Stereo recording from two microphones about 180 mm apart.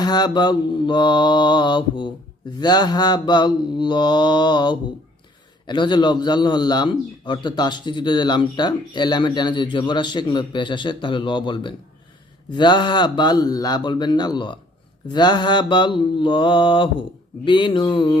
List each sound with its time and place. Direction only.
0.0 s a man's voice: 25° left (ahead or behind)